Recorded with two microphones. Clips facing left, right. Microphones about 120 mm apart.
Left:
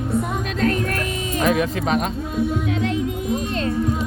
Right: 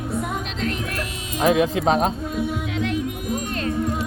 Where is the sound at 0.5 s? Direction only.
50° left (ahead or behind).